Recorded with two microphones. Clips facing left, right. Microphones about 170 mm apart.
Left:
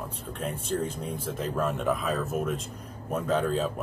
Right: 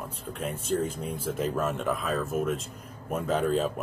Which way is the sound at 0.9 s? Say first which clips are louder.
Even; 25° left (ahead or behind).